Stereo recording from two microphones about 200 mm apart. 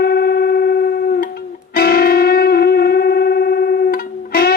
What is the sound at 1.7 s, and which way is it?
Music, 50° left (ahead or behind).